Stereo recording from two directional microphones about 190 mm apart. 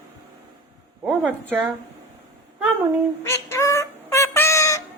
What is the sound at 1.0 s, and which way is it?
Speech, 5° right (ahead or behind).